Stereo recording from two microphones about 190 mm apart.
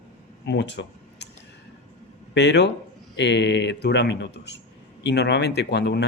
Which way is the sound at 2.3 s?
65° left (ahead or behind).